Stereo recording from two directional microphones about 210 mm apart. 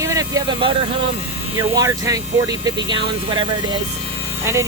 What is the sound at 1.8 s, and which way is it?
Speech, 15° right (ahead or behind).